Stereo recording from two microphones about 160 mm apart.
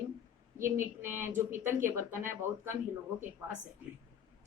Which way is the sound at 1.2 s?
15° right (ahead or behind).